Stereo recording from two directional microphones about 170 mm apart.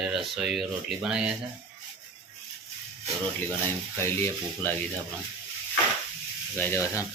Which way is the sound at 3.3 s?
15° left (ahead or behind).